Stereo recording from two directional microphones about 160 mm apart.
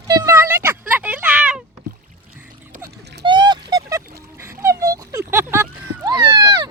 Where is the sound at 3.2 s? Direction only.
30° right (ahead or behind).